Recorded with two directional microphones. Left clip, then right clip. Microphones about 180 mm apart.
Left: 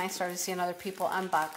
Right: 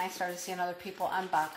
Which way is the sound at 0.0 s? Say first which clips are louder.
Left 1 dB; 50° left (ahead or behind).